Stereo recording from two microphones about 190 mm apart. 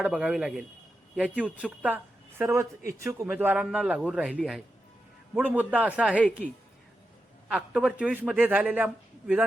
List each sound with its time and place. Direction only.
0.0 s a man's voice: 5° right (ahead or behind)
6.1 s a woman's voice: 10° left (ahead or behind)
7.4 s a man's voice: 5° right (ahead or behind)